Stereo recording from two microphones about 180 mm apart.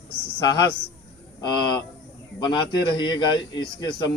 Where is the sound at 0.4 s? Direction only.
25° left (ahead or behind).